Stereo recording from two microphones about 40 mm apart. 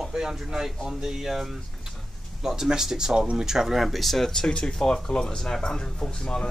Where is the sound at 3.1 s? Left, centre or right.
Right.